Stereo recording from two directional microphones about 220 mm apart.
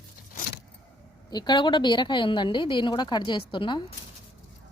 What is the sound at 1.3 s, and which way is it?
A woman's voice, 20° left (ahead or behind).